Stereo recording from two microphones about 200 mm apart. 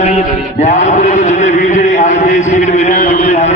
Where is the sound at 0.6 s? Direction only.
35° left (ahead or behind).